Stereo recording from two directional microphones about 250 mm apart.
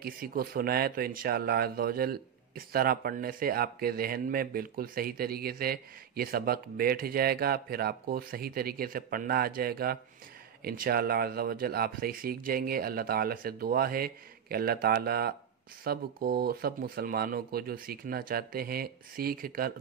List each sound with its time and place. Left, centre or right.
0.0 s speech: right